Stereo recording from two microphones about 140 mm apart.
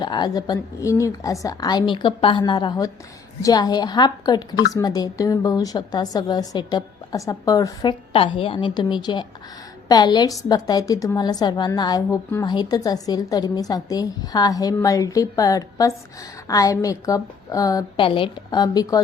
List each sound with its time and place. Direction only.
0.0 s a woman's voice: 30° left (ahead or behind)
8.1 s a woman's voice: 40° left (ahead or behind); by 18.0 s 25° left (ahead or behind)
18.0 s a woman's voice: 40° left (ahead or behind)